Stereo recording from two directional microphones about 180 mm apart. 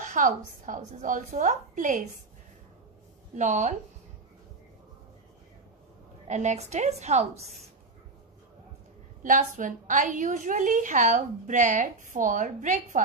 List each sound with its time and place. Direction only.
0.0 s a woman's voice: 45° right (ahead or behind)
3.3 s a woman's voice: 40° right (ahead or behind)
6.2 s a woman's voice: 40° right (ahead or behind)
9.2 s a woman's voice: 45° right (ahead or behind)